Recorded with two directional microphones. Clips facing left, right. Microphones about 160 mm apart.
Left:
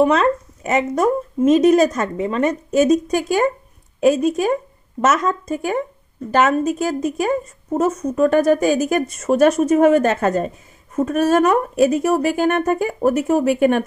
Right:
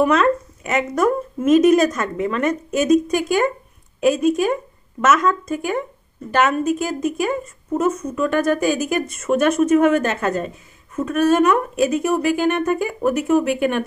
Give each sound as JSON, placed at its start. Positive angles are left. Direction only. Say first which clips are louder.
{"t": 0.0, "sound": "a woman's voice", "louder": "left 1 dB", "side_deg": 35}